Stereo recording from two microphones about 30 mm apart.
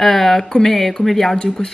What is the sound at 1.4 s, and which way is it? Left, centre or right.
Speech, left.